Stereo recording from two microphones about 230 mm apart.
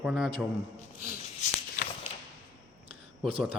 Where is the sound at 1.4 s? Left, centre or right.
Left.